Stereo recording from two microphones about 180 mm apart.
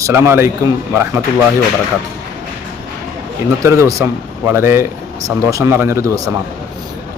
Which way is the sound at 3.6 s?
15° right (ahead or behind).